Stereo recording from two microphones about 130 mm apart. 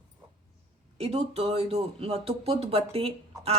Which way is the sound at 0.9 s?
55° right (ahead or behind).